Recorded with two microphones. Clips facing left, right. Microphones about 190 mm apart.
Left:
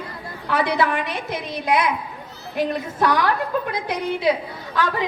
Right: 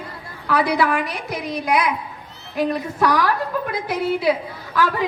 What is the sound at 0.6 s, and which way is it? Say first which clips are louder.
Speech: right 1 dB; 25° left (ahead or behind).